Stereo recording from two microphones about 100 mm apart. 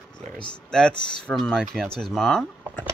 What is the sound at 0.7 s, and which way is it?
Speech, 5° left (ahead or behind).